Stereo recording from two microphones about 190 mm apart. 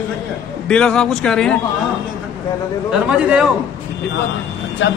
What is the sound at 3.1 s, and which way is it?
Speech, 5° right (ahead or behind).